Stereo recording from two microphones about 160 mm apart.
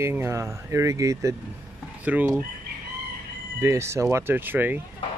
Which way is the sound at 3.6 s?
15° right (ahead or behind).